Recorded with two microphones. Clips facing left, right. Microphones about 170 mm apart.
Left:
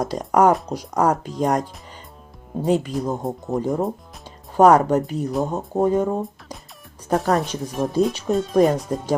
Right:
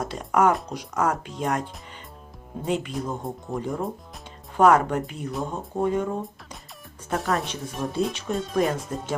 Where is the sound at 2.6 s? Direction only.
40° left (ahead or behind).